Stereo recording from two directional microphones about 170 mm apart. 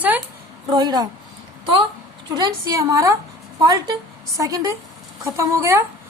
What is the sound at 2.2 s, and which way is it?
A woman's voice, 20° right (ahead or behind).